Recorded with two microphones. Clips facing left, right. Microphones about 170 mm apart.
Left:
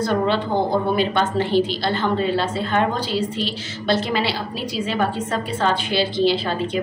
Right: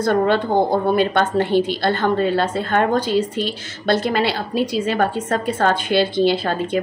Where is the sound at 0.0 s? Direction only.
50° right (ahead or behind).